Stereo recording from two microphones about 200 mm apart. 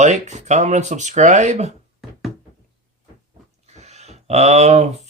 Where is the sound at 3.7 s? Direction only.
35° right (ahead or behind).